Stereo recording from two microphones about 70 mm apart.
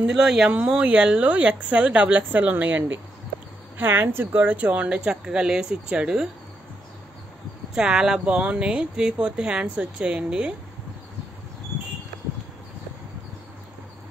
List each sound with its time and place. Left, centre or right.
0.0 s speech: centre
7.7 s speech: centre